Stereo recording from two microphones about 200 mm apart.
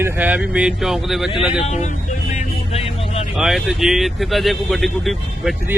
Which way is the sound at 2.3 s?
30° left (ahead or behind).